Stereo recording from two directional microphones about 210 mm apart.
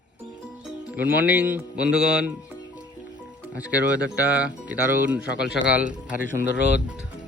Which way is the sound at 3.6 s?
5° right (ahead or behind).